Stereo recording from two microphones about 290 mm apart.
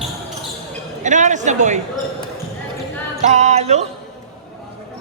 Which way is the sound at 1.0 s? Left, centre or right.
Right.